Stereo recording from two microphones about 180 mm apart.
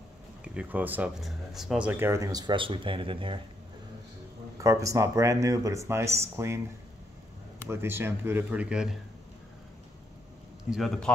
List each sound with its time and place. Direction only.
0.6 s speech: 10° right (ahead or behind); by 3.3 s 30° right (ahead or behind)
4.6 s speech: 15° right (ahead or behind)
7.6 s speech: 15° right (ahead or behind)
10.6 s a man's voice: centre (ahead or behind)